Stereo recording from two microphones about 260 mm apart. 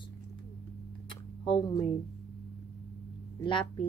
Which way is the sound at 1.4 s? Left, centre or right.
Centre.